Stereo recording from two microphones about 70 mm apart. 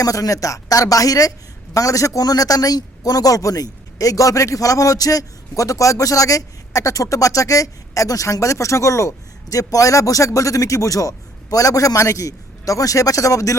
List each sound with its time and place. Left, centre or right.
0.0 s a man's voice: left